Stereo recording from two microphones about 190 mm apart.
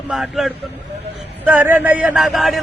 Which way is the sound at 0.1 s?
Centre (ahead or behind).